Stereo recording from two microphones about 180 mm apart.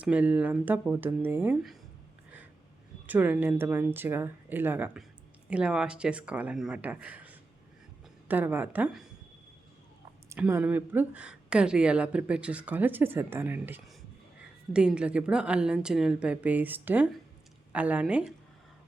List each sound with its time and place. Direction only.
0.0 s speech: 5° right (ahead or behind)
3.1 s speech: 10° right (ahead or behind)
10.2 s a woman's voice: 10° right (ahead or behind)